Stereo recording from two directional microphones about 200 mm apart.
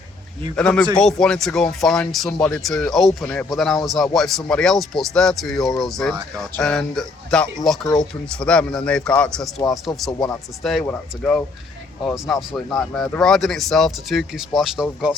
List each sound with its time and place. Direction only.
0.5 s speech: 5° left (ahead or behind)
10.1 s speech: 15° left (ahead or behind)
10.6 s speech: centre (ahead or behind)